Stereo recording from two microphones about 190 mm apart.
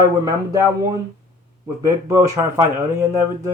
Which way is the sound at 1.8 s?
15° right (ahead or behind).